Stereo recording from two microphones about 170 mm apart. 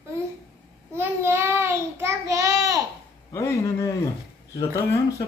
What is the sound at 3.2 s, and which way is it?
Speech, 20° left (ahead or behind).